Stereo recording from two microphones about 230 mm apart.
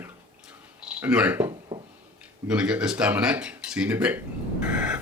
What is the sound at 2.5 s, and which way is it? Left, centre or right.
Speech, centre.